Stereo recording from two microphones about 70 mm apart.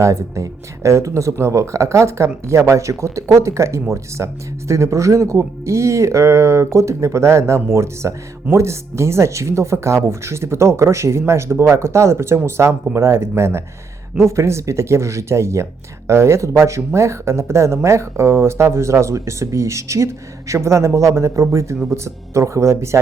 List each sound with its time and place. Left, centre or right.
0.0 s speech: right